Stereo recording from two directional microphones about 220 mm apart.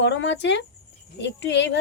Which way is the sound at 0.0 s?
55° left (ahead or behind).